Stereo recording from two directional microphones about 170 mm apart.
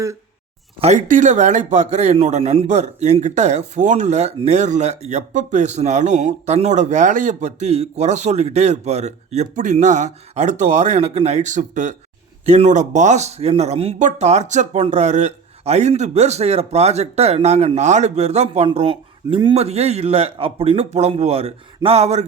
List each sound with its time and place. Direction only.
0.8 s a man's voice: 45° right (ahead or behind)